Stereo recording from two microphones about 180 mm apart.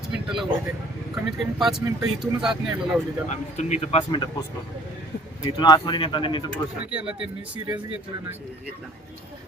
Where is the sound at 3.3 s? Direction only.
40° left (ahead or behind).